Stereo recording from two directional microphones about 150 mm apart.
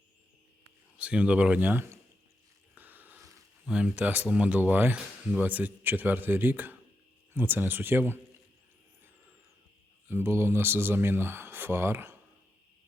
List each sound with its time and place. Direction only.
0.9 s speech: 10° right (ahead or behind)
2.7 s a sound: 10° right (ahead or behind)
3.7 s speech: 5° right (ahead or behind)
10.1 s speech: 15° right (ahead or behind)